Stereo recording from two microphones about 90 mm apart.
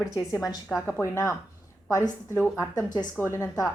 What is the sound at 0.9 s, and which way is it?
A woman's voice, 25° left (ahead or behind).